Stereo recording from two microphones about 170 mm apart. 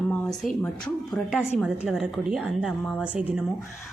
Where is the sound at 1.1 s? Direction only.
Centre (ahead or behind).